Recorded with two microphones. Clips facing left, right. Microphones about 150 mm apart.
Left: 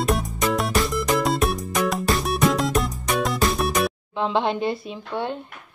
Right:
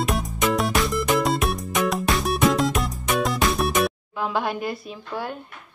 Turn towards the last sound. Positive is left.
turn(degrees=25)  # may be behind; listen again after turning